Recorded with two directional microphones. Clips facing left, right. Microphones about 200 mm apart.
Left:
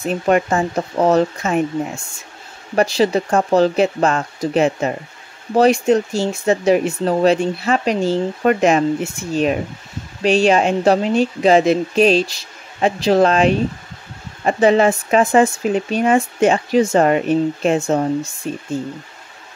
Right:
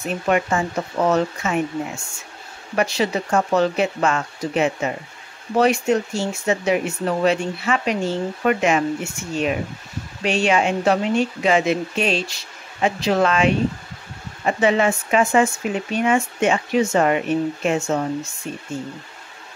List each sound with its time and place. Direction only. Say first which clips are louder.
0.0 s speech: left 4 dB; 35° left (ahead or behind)
3.0 s speech: left 5 dB; 35° left (ahead or behind)